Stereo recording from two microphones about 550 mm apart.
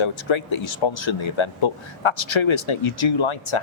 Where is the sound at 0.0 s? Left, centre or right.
Left.